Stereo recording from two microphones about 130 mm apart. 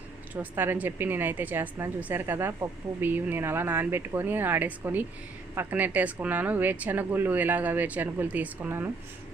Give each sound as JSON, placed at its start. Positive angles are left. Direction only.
{"t": 0.3, "sound": "a woman's voice", "side_deg": -15}